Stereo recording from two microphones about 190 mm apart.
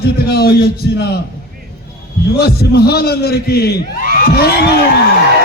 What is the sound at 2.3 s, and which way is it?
A man's voice, 55° left (ahead or behind).